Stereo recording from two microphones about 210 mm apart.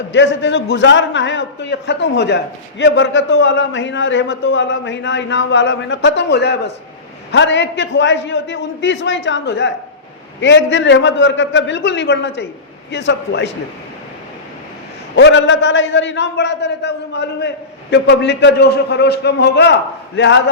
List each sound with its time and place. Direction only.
0.1 s a man's voice: 60° left (ahead or behind)
15.1 s a man's voice: 60° left (ahead or behind)